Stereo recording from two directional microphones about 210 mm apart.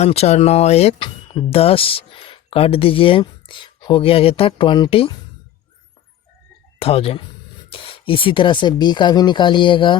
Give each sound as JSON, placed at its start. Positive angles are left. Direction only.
{"t": 0.0, "sound": "speech", "side_deg": 30}
{"t": 6.7, "sound": "speech", "side_deg": 25}